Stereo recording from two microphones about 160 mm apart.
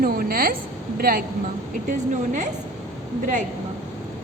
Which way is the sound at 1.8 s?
55° right (ahead or behind).